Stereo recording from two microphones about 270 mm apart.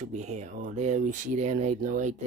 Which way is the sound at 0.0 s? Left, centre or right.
Right.